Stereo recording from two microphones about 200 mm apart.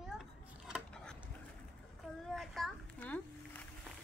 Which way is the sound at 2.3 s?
Centre (ahead or behind).